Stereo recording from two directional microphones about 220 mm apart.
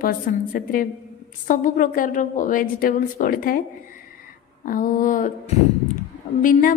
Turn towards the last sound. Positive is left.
turn(degrees=35)  # may be behind; listen again after turning